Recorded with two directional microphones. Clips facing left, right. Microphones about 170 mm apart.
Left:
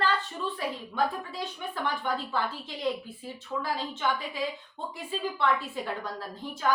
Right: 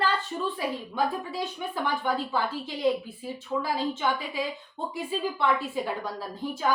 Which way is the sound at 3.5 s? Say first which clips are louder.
Right 4 dB; 20° right (ahead or behind).